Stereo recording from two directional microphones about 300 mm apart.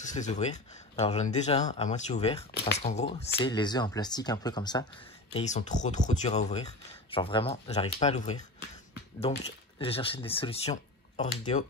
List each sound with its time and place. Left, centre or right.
0.0 s speech: left